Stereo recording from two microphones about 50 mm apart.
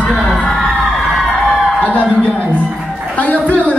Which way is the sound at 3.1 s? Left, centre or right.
Left.